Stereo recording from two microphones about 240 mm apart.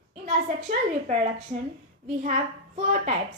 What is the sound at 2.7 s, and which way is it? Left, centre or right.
Speech, right.